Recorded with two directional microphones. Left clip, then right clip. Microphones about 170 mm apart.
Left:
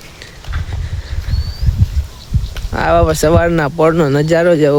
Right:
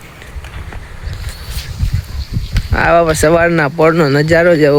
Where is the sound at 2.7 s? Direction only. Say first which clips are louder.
Right 2 dB; 5° left (ahead or behind).